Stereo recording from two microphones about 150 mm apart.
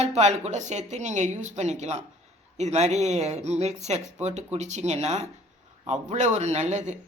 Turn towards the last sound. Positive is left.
turn(degrees=-50)  # may be behind; listen again after turning